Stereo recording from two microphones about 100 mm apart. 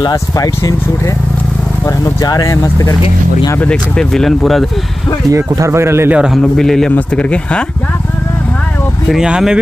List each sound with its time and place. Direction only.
0.0 s speech: 40° left (ahead or behind)
2.2 s speech: 35° left (ahead or behind)
4.1 s speech: 5° left (ahead or behind)
5.3 s speech: 30° right (ahead or behind)
6.1 s speech: 10° right (ahead or behind)
6.4 s speech: 5° left (ahead or behind)
9.1 s speech: 5° right (ahead or behind)